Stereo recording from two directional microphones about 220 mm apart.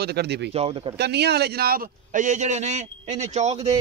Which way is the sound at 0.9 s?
50° right (ahead or behind).